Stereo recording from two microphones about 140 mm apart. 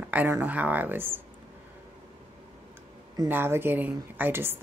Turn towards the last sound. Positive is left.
turn(degrees=-15)  # may be behind; listen again after turning